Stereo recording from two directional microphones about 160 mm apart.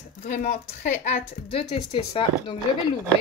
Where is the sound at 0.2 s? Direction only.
50° left (ahead or behind); by 2.6 s 35° left (ahead or behind).